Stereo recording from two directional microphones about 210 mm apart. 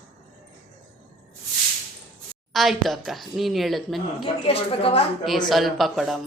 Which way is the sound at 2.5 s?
Centre (ahead or behind).